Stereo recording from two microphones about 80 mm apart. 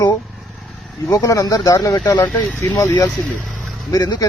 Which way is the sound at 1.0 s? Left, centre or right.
Left.